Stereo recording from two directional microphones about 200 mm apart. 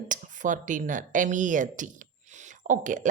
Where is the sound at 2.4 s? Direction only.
40° right (ahead or behind).